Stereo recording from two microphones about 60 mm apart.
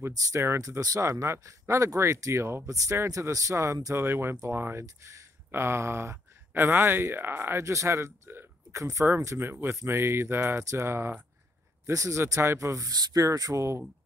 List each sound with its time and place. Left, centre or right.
0.1 s speech: right
0.4 s speech: right
2.7 s speech: right
4.0 s speech: right
4.8 s speech: right
5.5 s speech: right
7.5 s speech: right
11.8 s speech: right